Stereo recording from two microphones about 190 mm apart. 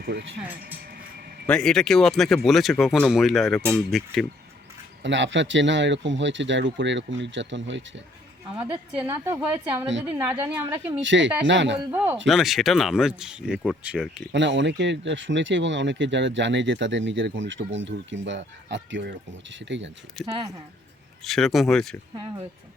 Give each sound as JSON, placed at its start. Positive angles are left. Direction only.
{"t": 0.0, "sound": "speech", "side_deg": -65}
{"t": 0.6, "sound": "a sound", "side_deg": -50}
{"t": 1.5, "sound": "speech", "side_deg": 5}
{"t": 5.0, "sound": "speech", "side_deg": -75}
{"t": 8.9, "sound": "a woman's voice", "side_deg": -10}
{"t": 11.0, "sound": "speech", "side_deg": -75}
{"t": 11.8, "sound": "a woman's voice", "side_deg": -10}
{"t": 14.3, "sound": "speech", "side_deg": -70}
{"t": 20.2, "sound": "speech", "side_deg": 0}